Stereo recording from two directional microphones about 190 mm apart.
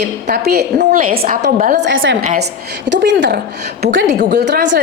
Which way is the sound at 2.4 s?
60° right (ahead or behind).